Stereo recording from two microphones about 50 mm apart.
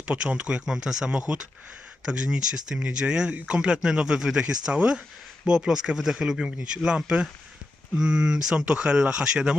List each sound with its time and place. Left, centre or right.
0.0 s speech: right
0.6 s speech: centre